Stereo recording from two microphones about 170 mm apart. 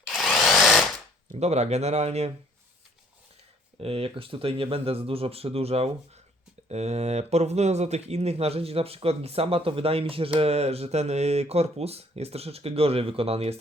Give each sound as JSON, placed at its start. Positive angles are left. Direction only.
{"t": 0.1, "sound": "drill", "side_deg": 0}
{"t": 1.3, "sound": "speech", "side_deg": -40}
{"t": 3.8, "sound": "speech", "side_deg": -35}